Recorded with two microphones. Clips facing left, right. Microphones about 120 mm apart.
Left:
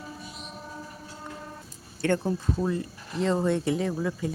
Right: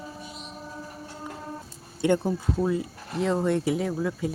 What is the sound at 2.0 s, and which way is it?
Speech, 15° right (ahead or behind).